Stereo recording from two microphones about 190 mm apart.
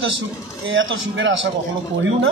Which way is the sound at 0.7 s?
80° right.